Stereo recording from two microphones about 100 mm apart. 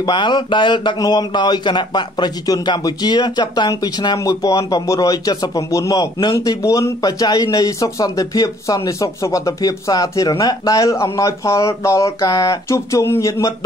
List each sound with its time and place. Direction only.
0.0 s speech: 50° left (ahead or behind)
6.3 s speech: 30° left (ahead or behind)